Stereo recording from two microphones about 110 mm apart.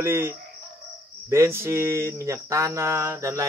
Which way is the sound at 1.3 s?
25° right (ahead or behind).